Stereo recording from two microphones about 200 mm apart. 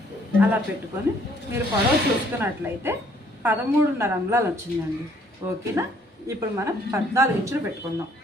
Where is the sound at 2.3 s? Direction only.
10° right (ahead or behind).